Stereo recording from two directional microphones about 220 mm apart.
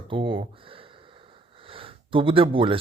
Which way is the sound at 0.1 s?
25° right (ahead or behind).